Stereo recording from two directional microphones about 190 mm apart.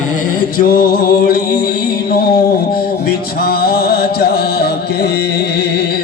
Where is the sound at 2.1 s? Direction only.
55° left (ahead or behind).